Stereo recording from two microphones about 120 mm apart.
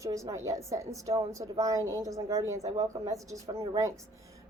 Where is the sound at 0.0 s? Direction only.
25° right (ahead or behind).